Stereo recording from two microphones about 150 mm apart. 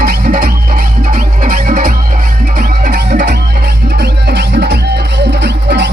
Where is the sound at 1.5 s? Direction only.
70° right (ahead or behind); by 3.3 s 90° right.